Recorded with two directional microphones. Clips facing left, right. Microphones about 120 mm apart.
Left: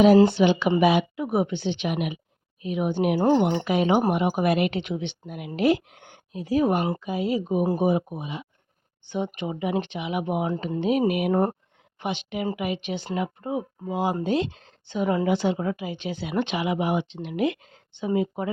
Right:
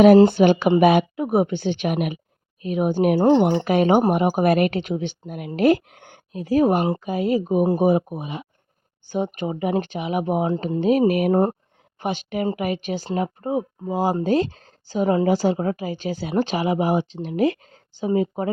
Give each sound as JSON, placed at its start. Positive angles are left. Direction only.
{"t": 0.3, "sound": "speech", "side_deg": -50}
{"t": 3.2, "sound": "speech", "side_deg": -25}
{"t": 3.6, "sound": "a woman's voice", "side_deg": -50}